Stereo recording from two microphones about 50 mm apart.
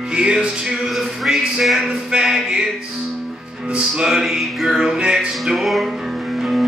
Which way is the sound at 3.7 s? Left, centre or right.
Centre.